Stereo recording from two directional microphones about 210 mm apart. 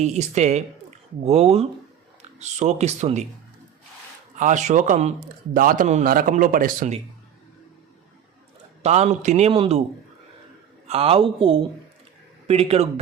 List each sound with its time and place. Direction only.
0.0 s a man's voice: 30° right (ahead or behind)
4.4 s a man's voice: 35° right (ahead or behind)
8.8 s a man's voice: 30° right (ahead or behind)
10.8 s speech: 30° right (ahead or behind)